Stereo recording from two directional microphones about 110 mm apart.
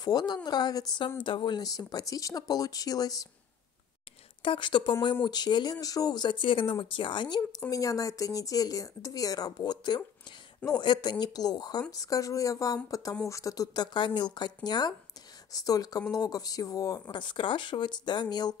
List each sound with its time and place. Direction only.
0.0 s a woman's voice: 40° left (ahead or behind)
4.4 s speech: 50° left (ahead or behind)
7.7 s a woman's voice: 30° left (ahead or behind)
17.1 s speech: 45° left (ahead or behind)